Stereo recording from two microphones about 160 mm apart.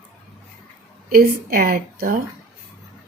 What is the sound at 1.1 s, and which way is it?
A woman's voice, 65° right (ahead or behind).